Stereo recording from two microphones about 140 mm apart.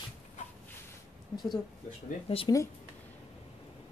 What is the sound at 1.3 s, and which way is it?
Speech, 30° left (ahead or behind).